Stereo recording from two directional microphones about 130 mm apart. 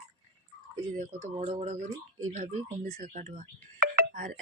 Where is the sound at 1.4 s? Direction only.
50° right (ahead or behind).